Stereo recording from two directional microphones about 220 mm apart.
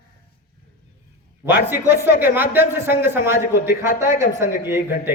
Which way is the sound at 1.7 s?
10° right (ahead or behind).